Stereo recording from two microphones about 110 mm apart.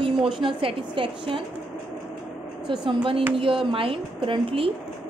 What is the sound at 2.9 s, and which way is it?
A woman's voice, 55° right (ahead or behind).